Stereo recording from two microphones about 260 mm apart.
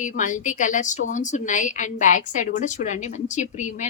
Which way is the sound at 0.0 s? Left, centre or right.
Left.